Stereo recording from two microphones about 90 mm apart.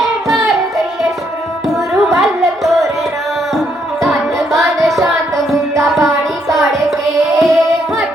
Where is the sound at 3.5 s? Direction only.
Centre (ahead or behind).